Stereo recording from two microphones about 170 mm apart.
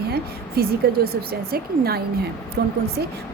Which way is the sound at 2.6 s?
80° right.